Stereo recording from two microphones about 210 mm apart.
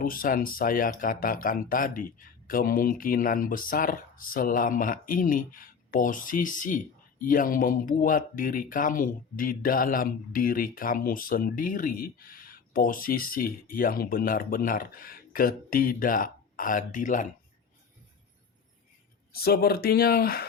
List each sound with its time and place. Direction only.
0.0 s speech: 45° left (ahead or behind)
19.3 s speech: 45° left (ahead or behind)